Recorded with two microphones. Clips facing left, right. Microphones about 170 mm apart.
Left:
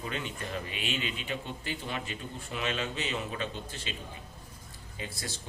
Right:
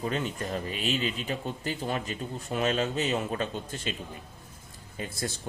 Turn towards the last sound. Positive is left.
turn(degrees=-50)  # may be behind; listen again after turning